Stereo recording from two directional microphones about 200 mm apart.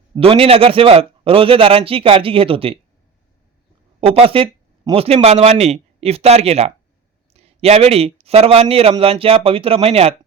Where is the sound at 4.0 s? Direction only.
30° right (ahead or behind).